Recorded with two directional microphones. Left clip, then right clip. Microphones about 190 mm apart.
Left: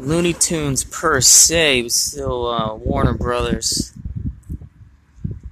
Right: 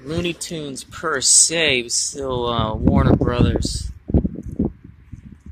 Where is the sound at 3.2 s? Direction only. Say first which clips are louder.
Even; 10° left (ahead or behind).